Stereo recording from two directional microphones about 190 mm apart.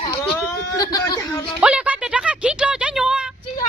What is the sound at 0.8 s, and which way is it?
Speech, 20° left (ahead or behind).